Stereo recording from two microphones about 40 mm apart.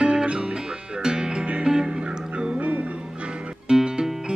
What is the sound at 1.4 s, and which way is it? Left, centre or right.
Music, right.